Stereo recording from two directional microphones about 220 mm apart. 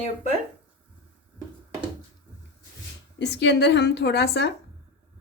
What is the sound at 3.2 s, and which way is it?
A woman's voice, 55° left (ahead or behind).